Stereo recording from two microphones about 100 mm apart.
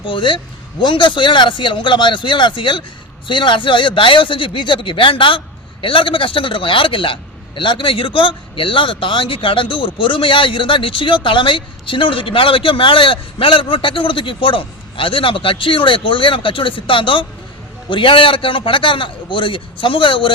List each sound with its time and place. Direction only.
0.0 s a man's voice: 55° left (ahead or behind)